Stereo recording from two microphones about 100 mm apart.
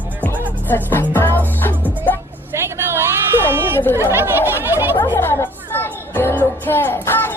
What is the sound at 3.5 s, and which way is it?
Chatter, 20° right (ahead or behind).